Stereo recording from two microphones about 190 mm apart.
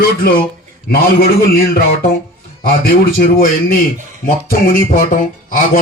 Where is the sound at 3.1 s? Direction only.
50° left (ahead or behind).